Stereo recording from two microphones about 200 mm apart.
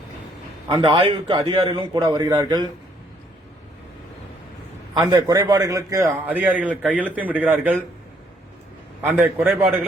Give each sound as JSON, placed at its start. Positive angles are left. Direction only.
{"t": 0.7, "sound": "a man's voice", "side_deg": -25}
{"t": 4.9, "sound": "a man's voice", "side_deg": -20}
{"t": 9.0, "sound": "a man's voice", "side_deg": -10}